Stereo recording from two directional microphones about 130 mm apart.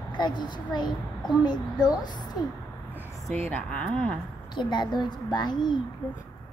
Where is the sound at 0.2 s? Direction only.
35° left (ahead or behind).